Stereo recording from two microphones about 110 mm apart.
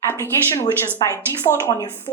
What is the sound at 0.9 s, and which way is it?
Speech, 25° left (ahead or behind).